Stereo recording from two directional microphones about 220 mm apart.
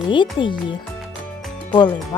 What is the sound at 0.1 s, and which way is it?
Speech, 20° left (ahead or behind).